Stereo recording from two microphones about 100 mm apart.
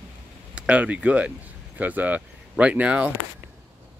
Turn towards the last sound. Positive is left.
turn(degrees=-10)  # may be behind; listen again after turning